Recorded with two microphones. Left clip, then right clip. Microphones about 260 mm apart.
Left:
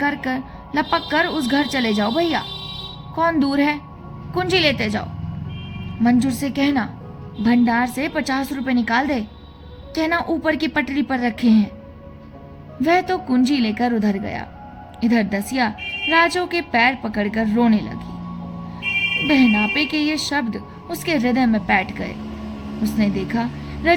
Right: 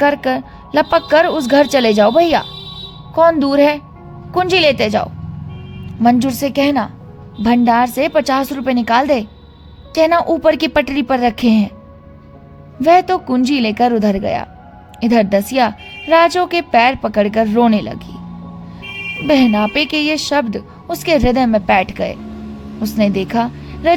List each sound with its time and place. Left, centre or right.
0.0 s speech: right
12.8 s speech: right
19.3 s a woman's voice: right